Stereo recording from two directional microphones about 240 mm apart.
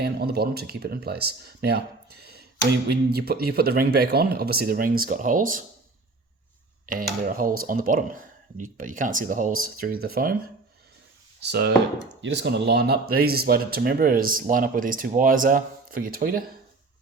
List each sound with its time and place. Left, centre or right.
0.0 s speech: right
2.9 s speech: right
6.8 s speech: right
11.3 s speech: right